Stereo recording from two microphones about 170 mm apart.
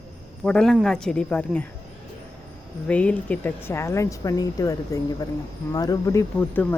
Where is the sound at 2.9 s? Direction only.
10° left (ahead or behind).